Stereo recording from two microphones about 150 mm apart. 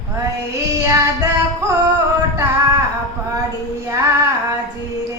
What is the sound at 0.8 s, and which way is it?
Child singing, 20° right (ahead or behind).